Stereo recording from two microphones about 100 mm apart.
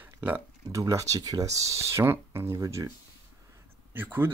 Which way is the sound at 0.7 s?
30° right (ahead or behind).